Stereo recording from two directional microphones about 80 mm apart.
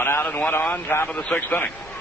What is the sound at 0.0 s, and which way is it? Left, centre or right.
A man's voice, left.